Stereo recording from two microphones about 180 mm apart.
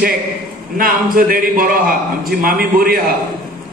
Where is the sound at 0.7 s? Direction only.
50° right (ahead or behind).